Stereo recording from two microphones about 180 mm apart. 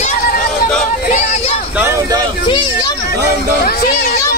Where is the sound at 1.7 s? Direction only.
10° right (ahead or behind).